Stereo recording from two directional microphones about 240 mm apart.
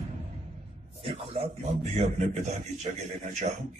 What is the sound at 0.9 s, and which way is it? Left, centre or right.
A man's voice, right.